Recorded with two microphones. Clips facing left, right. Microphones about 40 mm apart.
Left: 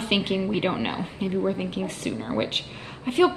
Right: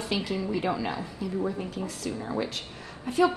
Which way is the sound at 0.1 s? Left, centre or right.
Left.